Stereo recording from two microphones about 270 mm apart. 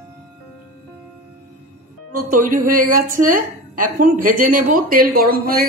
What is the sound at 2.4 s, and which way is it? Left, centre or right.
Speech, right.